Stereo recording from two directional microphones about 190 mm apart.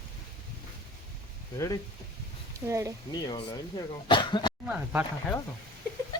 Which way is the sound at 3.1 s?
20° left (ahead or behind).